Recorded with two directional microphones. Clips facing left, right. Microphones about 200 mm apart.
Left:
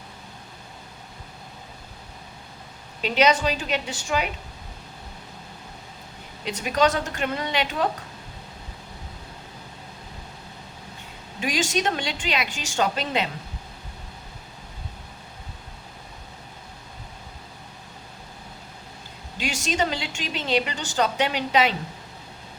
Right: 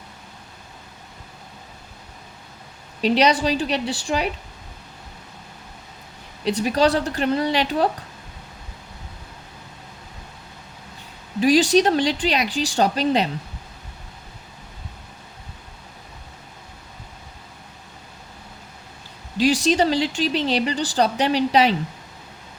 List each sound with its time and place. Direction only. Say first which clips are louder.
3.0 s a woman's voice: right 3 dB; 35° right (ahead or behind)
6.4 s a woman's voice: right 4 dB; 35° right (ahead or behind)
11.3 s a woman's voice: right 10 dB; 35° right (ahead or behind)
19.4 s a woman's voice: right 8 dB; 35° right (ahead or behind)